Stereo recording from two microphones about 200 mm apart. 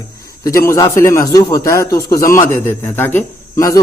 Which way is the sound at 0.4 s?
15° left (ahead or behind).